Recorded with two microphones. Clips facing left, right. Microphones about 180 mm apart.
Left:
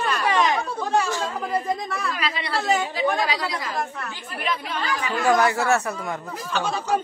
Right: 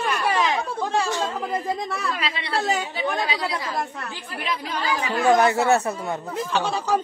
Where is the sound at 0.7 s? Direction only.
30° right (ahead or behind).